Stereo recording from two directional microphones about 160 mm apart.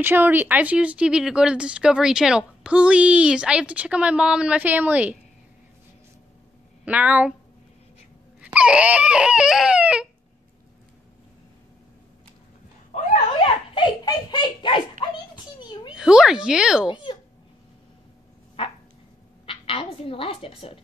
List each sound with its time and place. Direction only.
0.0 s speech: 10° right (ahead or behind)
6.8 s a woman's voice: 10° right (ahead or behind)
8.5 s a sound: 5° right (ahead or behind)
13.7 s giggle: 30° left (ahead or behind)
15.6 s a sound: 30° left (ahead or behind)
16.0 s a sound: 5° right (ahead or behind)
16.8 s speech: 30° left (ahead or behind)
18.6 s dog: 35° left (ahead or behind)
19.4 s a woman's voice: 35° left (ahead or behind)